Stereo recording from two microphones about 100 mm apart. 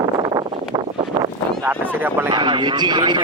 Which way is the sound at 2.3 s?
50° right (ahead or behind).